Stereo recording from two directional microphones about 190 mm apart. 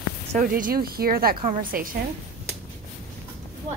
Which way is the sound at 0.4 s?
45° right (ahead or behind).